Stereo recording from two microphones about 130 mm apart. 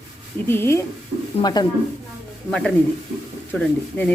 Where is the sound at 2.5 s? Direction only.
5° left (ahead or behind).